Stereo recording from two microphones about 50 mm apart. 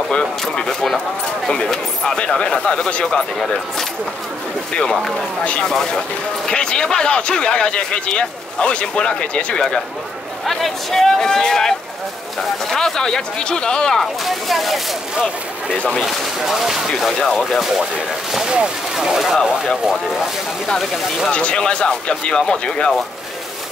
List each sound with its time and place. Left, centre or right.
0.1 s speech: centre
4.7 s speech: centre
5.4 s speech: left
5.7 s speech: centre
10.4 s speech: centre
14.2 s speech: centre
16.0 s speech: centre
18.9 s speech: centre
20.6 s speech: centre
21.3 s speech: left